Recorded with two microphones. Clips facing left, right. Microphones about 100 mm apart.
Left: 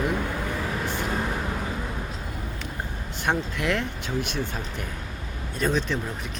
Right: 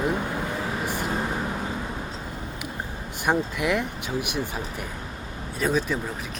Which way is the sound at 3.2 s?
10° right (ahead or behind).